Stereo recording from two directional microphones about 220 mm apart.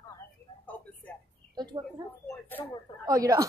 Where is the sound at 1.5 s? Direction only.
20° right (ahead or behind).